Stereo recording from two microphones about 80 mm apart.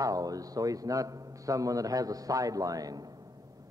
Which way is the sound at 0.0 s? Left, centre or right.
Right.